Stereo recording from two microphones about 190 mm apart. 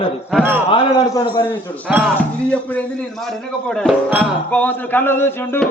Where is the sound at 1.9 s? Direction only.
5° right (ahead or behind).